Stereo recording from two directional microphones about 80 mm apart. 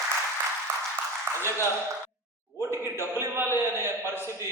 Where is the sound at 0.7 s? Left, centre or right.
Right.